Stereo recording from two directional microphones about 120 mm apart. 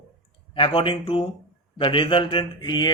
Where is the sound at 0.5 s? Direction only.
45° left (ahead or behind).